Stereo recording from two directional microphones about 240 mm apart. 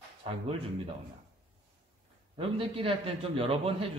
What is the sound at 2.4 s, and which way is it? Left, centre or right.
A man's voice, right.